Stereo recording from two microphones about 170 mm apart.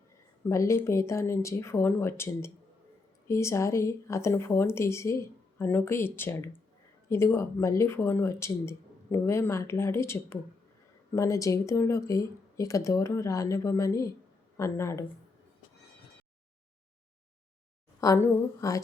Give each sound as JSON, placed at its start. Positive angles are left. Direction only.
{"t": 0.4, "sound": "speech", "side_deg": 20}
{"t": 18.0, "sound": "a woman's voice", "side_deg": 15}